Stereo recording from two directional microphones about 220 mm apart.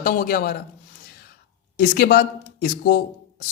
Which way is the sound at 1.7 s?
40° left (ahead or behind).